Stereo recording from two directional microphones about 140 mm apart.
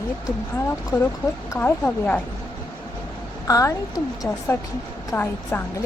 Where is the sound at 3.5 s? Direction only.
25° left (ahead or behind).